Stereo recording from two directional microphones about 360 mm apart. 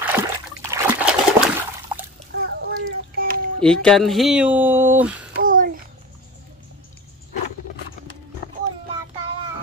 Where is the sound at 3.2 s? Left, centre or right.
Right.